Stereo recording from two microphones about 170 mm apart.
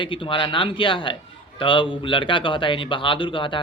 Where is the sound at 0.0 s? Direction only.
30° left (ahead or behind).